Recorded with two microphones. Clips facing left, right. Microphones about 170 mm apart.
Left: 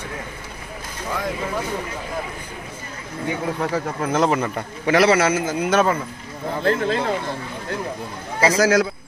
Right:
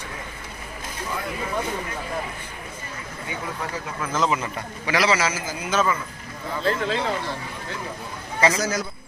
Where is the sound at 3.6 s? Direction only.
50° left (ahead or behind).